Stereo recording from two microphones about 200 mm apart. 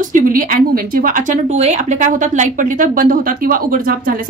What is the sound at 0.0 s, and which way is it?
Speech, 40° right (ahead or behind).